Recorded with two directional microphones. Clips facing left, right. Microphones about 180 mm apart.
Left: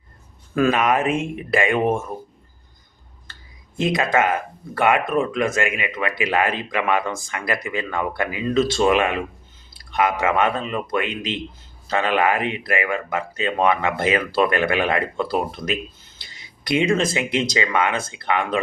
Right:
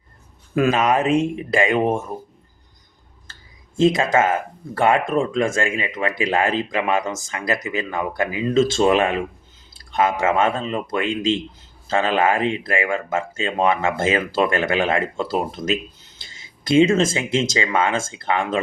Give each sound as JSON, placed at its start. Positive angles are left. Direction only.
{"t": 0.5, "sound": "speech", "side_deg": -20}
{"t": 3.8, "sound": "speech", "side_deg": -25}